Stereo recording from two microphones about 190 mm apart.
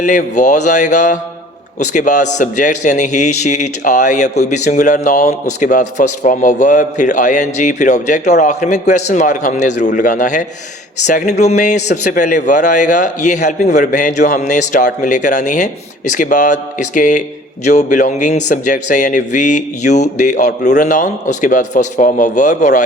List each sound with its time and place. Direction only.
0.0 s a man's voice: 40° left (ahead or behind)